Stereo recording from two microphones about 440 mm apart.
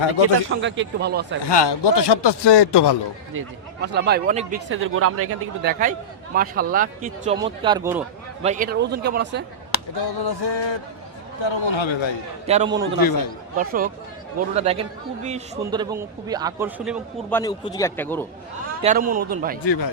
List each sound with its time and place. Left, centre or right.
0.6 s speech: right
1.5 s a man's voice: left
3.3 s speech: right
9.7 s a man's voice: left
11.4 s a man's voice: left
12.5 s a man's voice: centre
13.0 s speech: left
13.6 s a man's voice: centre
18.8 s speech: centre
19.6 s speech: left